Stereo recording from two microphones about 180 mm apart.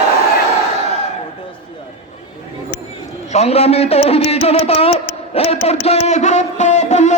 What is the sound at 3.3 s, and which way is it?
A man's voice, 35° left (ahead or behind).